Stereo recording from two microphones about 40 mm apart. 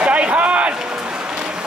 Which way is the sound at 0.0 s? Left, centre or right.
Right.